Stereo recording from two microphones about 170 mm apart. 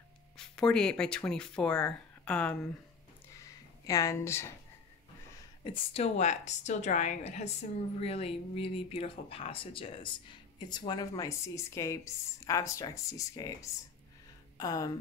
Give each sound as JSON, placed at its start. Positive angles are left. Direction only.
{"t": 0.4, "sound": "speech", "side_deg": 5}
{"t": 3.3, "sound": "a sound", "side_deg": 20}
{"t": 5.6, "sound": "a woman's voice", "side_deg": 35}